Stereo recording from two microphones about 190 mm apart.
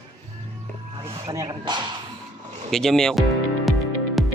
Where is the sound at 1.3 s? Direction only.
20° right (ahead or behind).